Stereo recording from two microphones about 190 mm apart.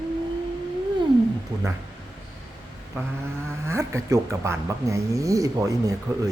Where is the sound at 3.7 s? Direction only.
15° right (ahead or behind).